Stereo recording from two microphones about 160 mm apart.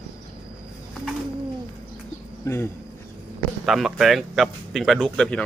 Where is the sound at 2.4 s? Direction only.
15° left (ahead or behind).